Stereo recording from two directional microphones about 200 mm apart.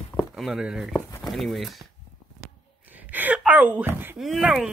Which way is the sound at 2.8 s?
10° right (ahead or behind).